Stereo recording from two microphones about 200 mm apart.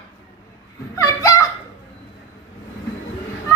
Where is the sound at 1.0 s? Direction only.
15° left (ahead or behind).